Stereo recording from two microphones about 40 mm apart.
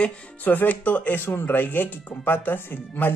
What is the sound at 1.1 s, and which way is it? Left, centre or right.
Speech, left.